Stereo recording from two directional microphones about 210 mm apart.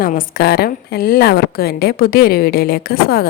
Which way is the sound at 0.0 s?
40° left (ahead or behind).